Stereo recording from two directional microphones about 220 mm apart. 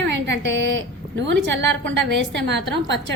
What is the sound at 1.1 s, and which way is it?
A woman's voice, 55° right (ahead or behind).